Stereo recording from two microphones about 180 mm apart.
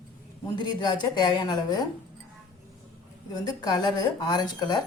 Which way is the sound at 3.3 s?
25° left (ahead or behind).